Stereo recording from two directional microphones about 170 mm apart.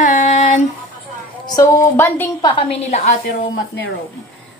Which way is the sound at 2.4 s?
35° left (ahead or behind).